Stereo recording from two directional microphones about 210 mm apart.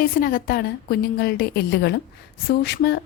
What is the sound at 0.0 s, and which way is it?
Speech, 45° left (ahead or behind).